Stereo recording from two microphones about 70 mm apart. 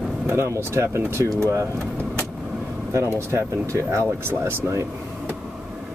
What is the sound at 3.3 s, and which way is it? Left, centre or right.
Speech, right.